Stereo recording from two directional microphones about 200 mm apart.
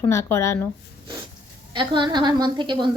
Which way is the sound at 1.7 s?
25° right (ahead or behind).